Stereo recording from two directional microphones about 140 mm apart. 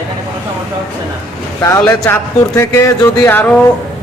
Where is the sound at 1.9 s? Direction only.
20° left (ahead or behind).